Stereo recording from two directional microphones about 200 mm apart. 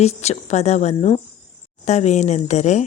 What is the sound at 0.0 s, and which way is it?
Speech, 30° left (ahead or behind).